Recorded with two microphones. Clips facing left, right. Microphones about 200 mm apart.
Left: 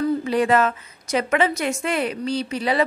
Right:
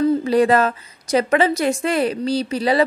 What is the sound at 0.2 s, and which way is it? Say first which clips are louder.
A woman's voice: right 3 dB; 35° right (ahead or behind).